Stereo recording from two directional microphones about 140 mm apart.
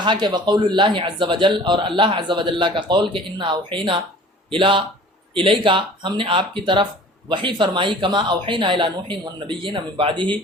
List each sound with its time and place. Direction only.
0.0 s a man's voice: 30° right (ahead or behind)